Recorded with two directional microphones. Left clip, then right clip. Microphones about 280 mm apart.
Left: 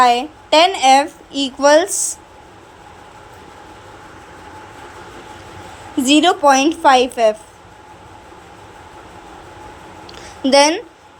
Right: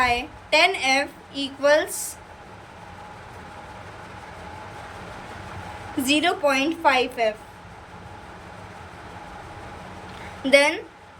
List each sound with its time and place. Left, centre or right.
0.0 s speech: centre
6.0 s speech: centre
10.4 s speech: centre